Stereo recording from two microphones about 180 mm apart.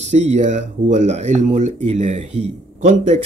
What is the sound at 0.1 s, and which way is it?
Speech, 40° right (ahead or behind).